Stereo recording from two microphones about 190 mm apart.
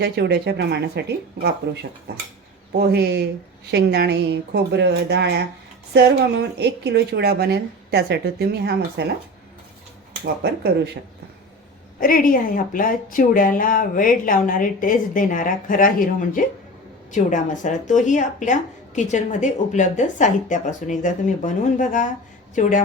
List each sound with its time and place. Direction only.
0.0 s a woman's voice: 60° right (ahead or behind)
10.4 s a woman's voice: 60° right (ahead or behind)
11.9 s a woman's voice: 45° left (ahead or behind)